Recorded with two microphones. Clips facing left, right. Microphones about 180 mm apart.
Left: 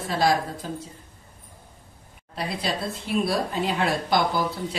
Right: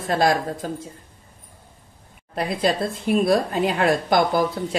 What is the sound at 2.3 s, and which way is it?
Speech, 50° right (ahead or behind).